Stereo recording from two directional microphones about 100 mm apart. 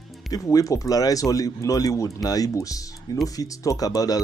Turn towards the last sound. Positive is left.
turn(degrees=40)  # may be behind; listen again after turning